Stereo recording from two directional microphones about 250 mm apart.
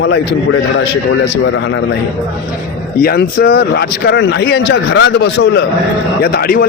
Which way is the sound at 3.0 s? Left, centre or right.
Left.